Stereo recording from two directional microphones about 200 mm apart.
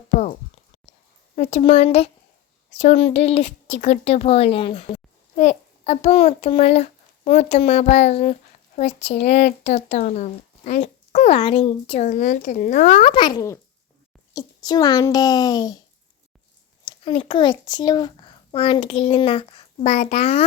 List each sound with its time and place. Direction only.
0.1 s a sound: 35° left (ahead or behind)
1.4 s a child's voice: 35° left (ahead or behind)
16.8 s a child's voice: 25° left (ahead or behind)